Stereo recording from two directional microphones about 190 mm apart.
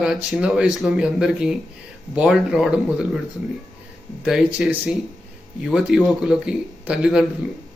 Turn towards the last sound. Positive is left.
turn(degrees=-5)  # may be behind; listen again after turning